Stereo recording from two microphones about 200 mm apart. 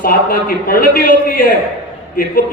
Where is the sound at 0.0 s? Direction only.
45° left (ahead or behind).